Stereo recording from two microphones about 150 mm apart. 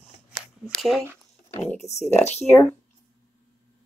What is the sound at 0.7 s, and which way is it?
Speech, centre (ahead or behind).